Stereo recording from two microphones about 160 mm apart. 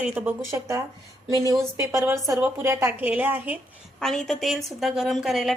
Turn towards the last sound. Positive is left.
turn(degrees=0)  # may be behind; listen again after turning